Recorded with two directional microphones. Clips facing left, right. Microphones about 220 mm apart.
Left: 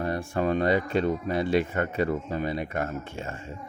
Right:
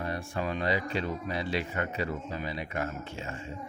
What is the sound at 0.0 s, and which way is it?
A man's voice, 45° left (ahead or behind).